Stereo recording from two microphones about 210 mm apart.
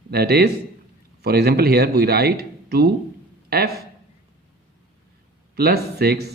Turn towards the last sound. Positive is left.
turn(degrees=-50)  # may be behind; listen again after turning